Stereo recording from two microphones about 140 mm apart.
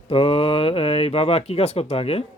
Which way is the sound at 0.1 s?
40° left (ahead or behind).